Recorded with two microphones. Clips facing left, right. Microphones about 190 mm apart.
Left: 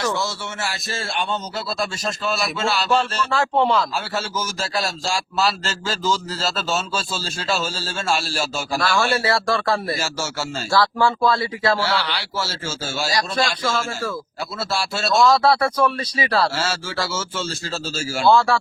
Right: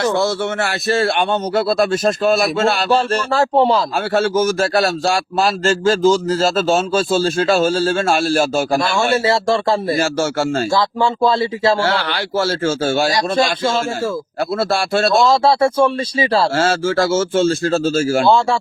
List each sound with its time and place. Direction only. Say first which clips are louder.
0.0 s speech: right 8 dB; 60° right (ahead or behind)
3.3 s a man's voice: right 4 dB; 35° right (ahead or behind)
3.9 s a man's voice: right 10 dB; 55° right (ahead or behind)
8.8 s speech: right 4 dB; 25° right (ahead or behind)
10.0 s speech: right 10 dB; 55° right (ahead or behind)
10.7 s speech: right 2 dB; 20° right (ahead or behind)
11.8 s speech: right 5 dB; 50° right (ahead or behind)
13.1 s speech: right 6 dB; 25° right (ahead or behind)
14.6 s speech: right 8 dB; 55° right (ahead or behind)
15.3 s speech: right 4 dB; 25° right (ahead or behind)
16.6 s a man's voice: right 10 dB; 50° right (ahead or behind)
18.3 s speech: left 1 dB; 20° right (ahead or behind)